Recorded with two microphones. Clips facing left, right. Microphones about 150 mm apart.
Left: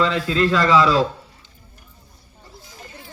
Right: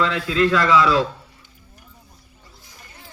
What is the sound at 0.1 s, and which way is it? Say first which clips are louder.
Speech: even; 30° left (ahead or behind).